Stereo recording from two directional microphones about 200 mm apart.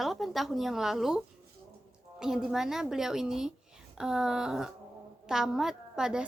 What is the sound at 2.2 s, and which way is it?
A woman's voice, 5° right (ahead or behind).